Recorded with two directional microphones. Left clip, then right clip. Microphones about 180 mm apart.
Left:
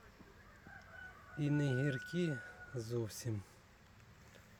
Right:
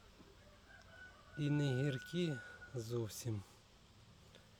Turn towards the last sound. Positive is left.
turn(degrees=0)  # may be behind; listen again after turning